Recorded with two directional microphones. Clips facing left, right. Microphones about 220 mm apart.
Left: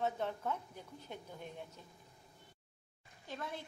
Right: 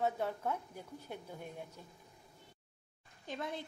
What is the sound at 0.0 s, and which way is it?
Speech, 10° right (ahead or behind).